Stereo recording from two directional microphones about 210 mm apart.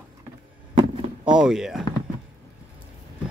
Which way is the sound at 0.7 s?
20° right (ahead or behind).